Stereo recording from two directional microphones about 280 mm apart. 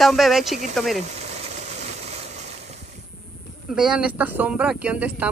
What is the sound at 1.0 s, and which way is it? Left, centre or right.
Engine, right.